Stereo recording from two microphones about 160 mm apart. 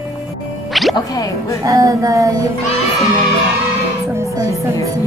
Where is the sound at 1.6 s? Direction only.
20° right (ahead or behind).